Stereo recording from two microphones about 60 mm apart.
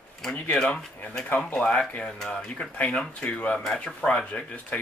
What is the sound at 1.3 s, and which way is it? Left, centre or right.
Speech, centre.